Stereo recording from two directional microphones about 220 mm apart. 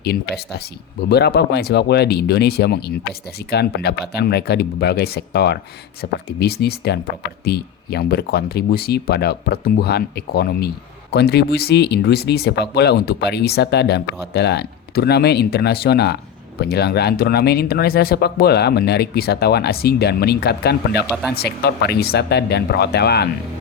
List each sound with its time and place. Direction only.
0.0 s speech: 45° left (ahead or behind)
21.1 s speech: centre (ahead or behind)
21.6 s speech: 45° left (ahead or behind)